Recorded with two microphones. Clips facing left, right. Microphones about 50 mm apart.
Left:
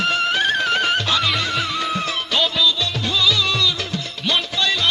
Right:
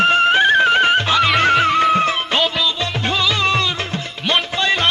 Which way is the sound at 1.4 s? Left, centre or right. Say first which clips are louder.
Right 9 dB; right.